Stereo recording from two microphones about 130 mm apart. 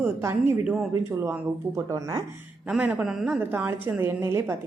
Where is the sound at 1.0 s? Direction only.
20° right (ahead or behind).